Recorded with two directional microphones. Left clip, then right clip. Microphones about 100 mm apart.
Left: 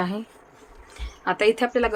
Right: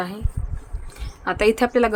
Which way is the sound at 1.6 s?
90° right.